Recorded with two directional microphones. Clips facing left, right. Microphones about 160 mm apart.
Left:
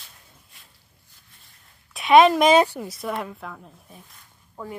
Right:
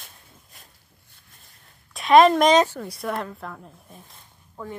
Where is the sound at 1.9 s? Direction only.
Centre (ahead or behind).